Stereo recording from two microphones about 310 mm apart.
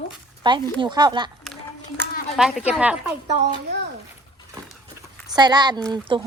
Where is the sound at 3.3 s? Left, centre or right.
Right.